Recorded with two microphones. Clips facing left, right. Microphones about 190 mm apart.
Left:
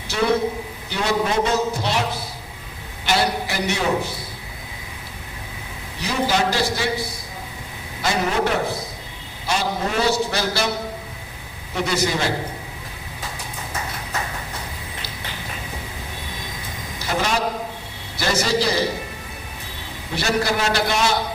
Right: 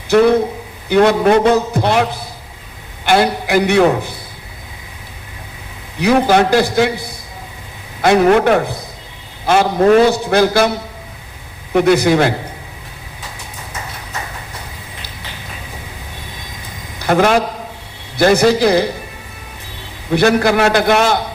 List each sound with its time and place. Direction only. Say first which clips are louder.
0.9 s a man's voice: right 11 dB; 60° right (ahead or behind)
6.0 s a man's voice: right 10 dB; 60° right (ahead or behind)
8.0 s a man's voice: right 11 dB; 60° right (ahead or behind)
11.7 s a man's voice: right 11 dB; 55° right (ahead or behind)
17.0 s a man's voice: right 10 dB; 55° right (ahead or behind)
20.1 s a man's voice: right 9 dB; 55° right (ahead or behind)